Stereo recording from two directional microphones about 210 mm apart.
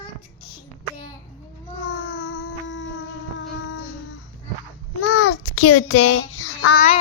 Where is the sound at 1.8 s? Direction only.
90° left; by 3.9 s 70° left (ahead or behind).